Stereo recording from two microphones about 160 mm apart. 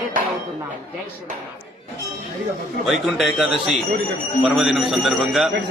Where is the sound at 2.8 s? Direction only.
Centre (ahead or behind).